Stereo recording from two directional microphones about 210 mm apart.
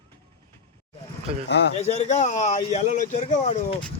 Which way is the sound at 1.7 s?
30° left (ahead or behind).